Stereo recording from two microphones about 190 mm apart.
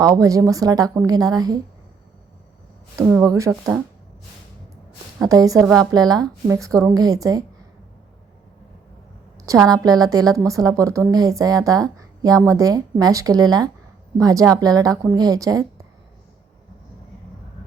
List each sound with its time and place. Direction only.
0.0 s a woman's voice: 20° right (ahead or behind)
2.9 s a woman's voice: 15° right (ahead or behind)
5.2 s a woman's voice: 20° right (ahead or behind)
9.6 s a woman's voice: 20° right (ahead or behind)